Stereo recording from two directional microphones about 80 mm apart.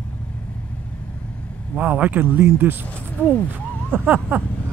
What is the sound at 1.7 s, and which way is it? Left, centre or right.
Speech, centre.